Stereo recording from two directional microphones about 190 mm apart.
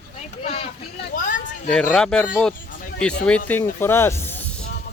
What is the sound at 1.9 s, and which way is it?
Speech, 5° left (ahead or behind).